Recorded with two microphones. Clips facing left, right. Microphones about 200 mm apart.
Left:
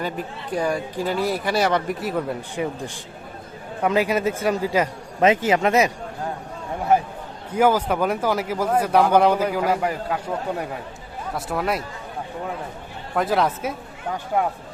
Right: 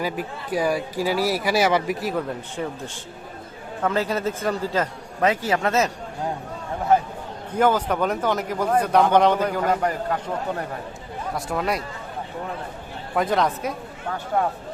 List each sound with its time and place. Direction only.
0.0 s speech: 5° right (ahead or behind); by 2.7 s 10° left (ahead or behind)
3.8 s speech: 10° left (ahead or behind)
7.5 s a woman's voice: 10° left (ahead or behind)
13.1 s a woman's voice: 5° left (ahead or behind)